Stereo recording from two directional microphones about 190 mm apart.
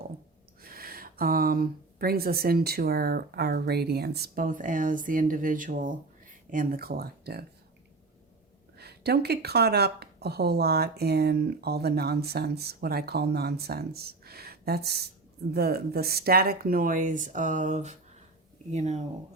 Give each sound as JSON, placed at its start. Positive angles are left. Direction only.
{"t": 0.6, "sound": "speech", "side_deg": -50}
{"t": 8.8, "sound": "speech", "side_deg": -60}